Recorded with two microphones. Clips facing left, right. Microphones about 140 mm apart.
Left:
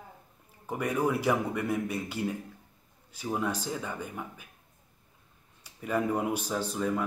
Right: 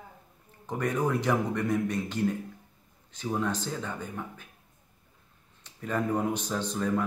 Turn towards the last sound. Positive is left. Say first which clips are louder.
# right 1 dB
turn(degrees=5)  # may be behind; listen again after turning